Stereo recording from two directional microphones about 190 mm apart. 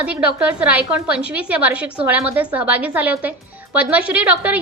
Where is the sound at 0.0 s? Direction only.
5° right (ahead or behind).